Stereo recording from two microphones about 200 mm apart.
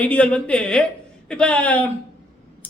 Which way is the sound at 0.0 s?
5° left (ahead or behind).